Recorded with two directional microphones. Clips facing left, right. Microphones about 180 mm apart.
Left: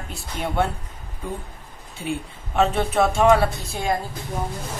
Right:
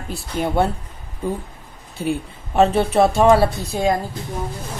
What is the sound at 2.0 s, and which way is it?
A woman's voice, 40° right (ahead or behind).